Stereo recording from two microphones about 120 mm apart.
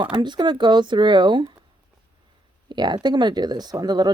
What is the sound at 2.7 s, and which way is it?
Speech, 35° right (ahead or behind).